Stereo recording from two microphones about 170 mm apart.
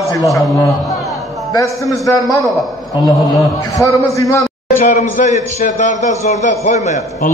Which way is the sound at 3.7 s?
20° left (ahead or behind).